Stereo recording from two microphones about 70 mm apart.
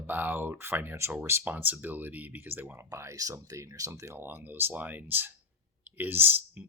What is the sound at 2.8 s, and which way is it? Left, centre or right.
Speech, right.